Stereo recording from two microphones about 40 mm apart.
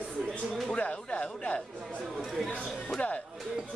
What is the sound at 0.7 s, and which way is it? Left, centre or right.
Speech, left.